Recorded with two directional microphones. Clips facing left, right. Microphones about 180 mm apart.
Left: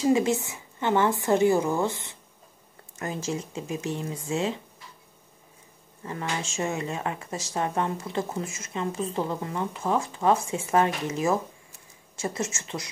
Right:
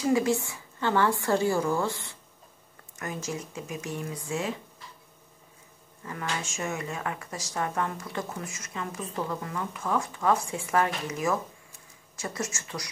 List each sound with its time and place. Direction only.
0.0 s speech: 25° left (ahead or behind)
6.0 s speech: 25° left (ahead or behind)